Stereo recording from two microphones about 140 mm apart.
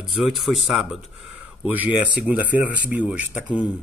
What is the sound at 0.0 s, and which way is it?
Speech, centre (ahead or behind).